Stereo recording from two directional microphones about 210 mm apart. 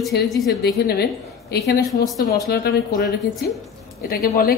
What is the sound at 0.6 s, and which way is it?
A woman's voice, 50° left (ahead or behind).